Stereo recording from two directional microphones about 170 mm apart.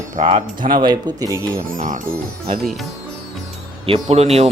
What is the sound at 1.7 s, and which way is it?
Speech, 55° right (ahead or behind).